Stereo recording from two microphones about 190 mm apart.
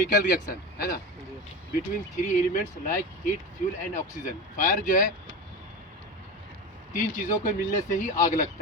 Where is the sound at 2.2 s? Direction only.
40° left (ahead or behind).